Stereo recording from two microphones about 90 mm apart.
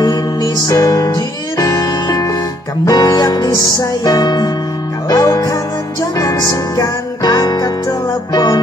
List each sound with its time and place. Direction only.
0.0 s music: 45° left (ahead or behind)